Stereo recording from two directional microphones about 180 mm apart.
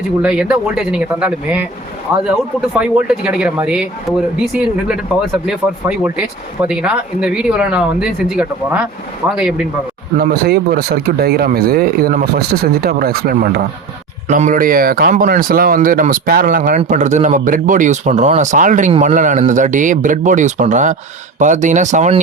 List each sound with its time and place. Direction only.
0.2 s speech: 5° right (ahead or behind)
5.5 s speech: 5° right (ahead or behind)
10.2 s speech: 55° right (ahead or behind); by 22.2 s 40° right (ahead or behind)